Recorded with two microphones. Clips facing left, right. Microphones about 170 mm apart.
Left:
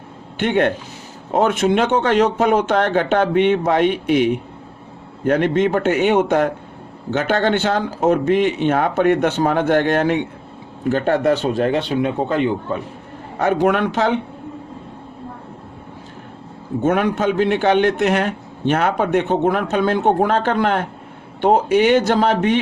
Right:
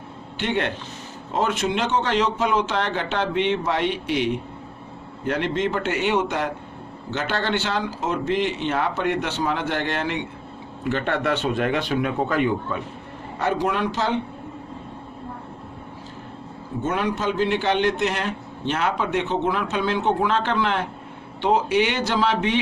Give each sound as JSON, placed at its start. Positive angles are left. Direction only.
{"t": 0.3, "sound": "a man's voice", "side_deg": 55}
{"t": 13.4, "sound": "speech", "side_deg": 60}
{"t": 16.8, "sound": "a man's voice", "side_deg": 60}